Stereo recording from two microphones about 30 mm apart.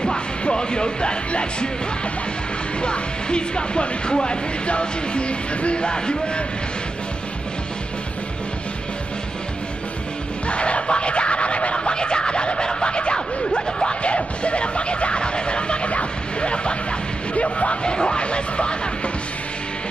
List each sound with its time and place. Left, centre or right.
0.0 s speech: left
2.8 s speech: left
10.5 s speech: left
14.0 s speech: left
17.8 s speech: left